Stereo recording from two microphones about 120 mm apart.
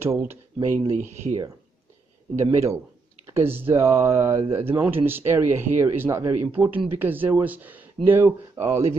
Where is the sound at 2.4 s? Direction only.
25° right (ahead or behind).